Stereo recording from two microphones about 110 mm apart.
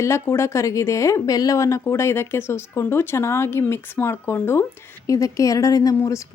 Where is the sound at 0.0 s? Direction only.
25° left (ahead or behind).